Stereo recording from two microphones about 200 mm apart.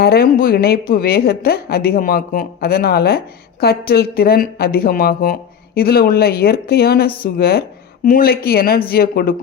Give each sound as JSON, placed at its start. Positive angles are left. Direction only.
{"t": 0.0, "sound": "speech", "side_deg": 50}